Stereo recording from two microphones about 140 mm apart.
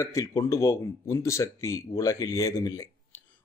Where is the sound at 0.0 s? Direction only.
20° left (ahead or behind).